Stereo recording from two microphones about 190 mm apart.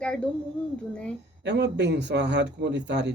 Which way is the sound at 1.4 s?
65° right (ahead or behind).